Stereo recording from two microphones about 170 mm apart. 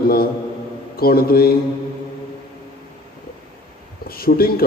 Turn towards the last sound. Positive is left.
turn(degrees=60)  # may be behind; listen again after turning